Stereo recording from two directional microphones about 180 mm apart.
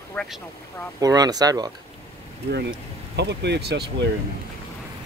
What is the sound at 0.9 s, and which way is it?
Speech, 20° right (ahead or behind).